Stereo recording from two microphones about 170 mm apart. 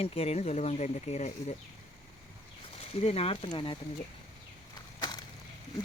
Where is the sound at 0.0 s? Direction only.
40° left (ahead or behind).